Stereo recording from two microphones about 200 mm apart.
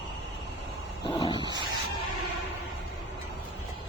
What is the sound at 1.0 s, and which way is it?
Dog, 25° left (ahead or behind).